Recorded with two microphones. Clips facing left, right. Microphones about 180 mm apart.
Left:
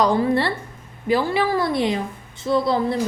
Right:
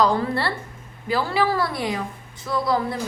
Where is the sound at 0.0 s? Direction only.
20° left (ahead or behind).